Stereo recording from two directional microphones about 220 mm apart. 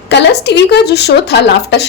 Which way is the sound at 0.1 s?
50° left (ahead or behind).